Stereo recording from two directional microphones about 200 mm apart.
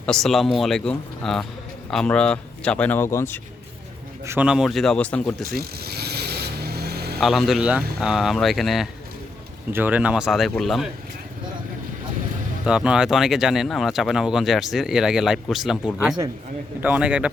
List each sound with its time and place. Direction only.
0.0 s speech: centre (ahead or behind)
4.3 s speech: 5° right (ahead or behind)
5.5 s vehicle: 50° right (ahead or behind)
7.2 s speech: centre (ahead or behind)
12.6 s a man's voice: 5° right (ahead or behind)